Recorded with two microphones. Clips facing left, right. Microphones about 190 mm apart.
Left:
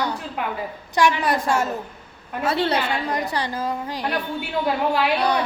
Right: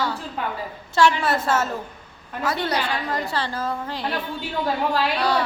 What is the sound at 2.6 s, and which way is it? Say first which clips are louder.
A woman's voice: left 2 dB; 25° left (ahead or behind).